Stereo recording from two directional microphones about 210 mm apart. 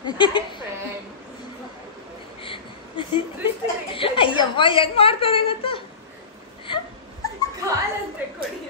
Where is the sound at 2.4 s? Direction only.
25° left (ahead or behind).